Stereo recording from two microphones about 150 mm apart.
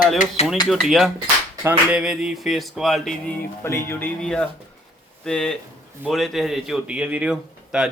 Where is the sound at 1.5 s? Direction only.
15° right (ahead or behind); by 3.3 s centre (ahead or behind).